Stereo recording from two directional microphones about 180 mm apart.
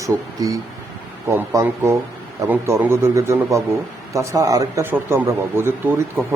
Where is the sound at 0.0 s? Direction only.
20° right (ahead or behind).